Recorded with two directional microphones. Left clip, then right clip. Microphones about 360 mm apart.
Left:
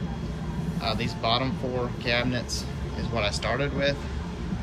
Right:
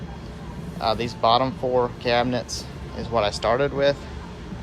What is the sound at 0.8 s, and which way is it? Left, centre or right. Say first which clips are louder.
Speech: right 7 dB; centre.